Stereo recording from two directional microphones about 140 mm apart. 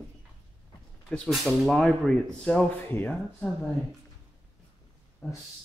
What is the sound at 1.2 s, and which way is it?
Speech, centre (ahead or behind).